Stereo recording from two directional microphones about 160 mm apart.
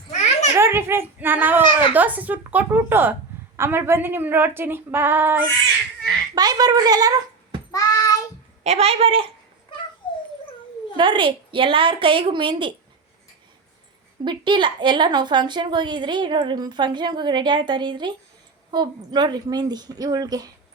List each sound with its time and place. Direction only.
0.1 s a sound: 45° left (ahead or behind)
0.5 s a child's voice: 15° right (ahead or behind)
6.3 s a woman's voice: 25° right (ahead or behind)
7.7 s child singing: 20° left (ahead or behind)
8.6 s a woman's voice: 40° right (ahead or behind)
10.0 s dog: 30° left (ahead or behind)
10.9 s a woman's voice: 30° right (ahead or behind)
14.3 s a woman's voice: 30° right (ahead or behind)